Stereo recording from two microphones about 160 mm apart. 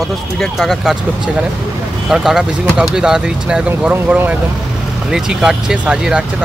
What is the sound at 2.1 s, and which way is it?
Speech, 5° right (ahead or behind).